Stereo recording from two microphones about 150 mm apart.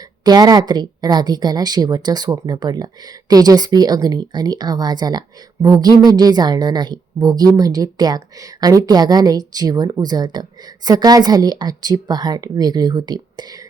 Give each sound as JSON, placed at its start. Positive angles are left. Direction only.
{"t": 0.3, "sound": "speech", "side_deg": -25}